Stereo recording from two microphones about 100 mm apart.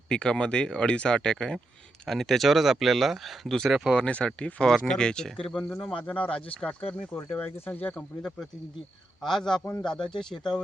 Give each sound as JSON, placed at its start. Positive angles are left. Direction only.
{"t": 0.1, "sound": "speech", "side_deg": 10}
{"t": 9.2, "sound": "speech", "side_deg": 5}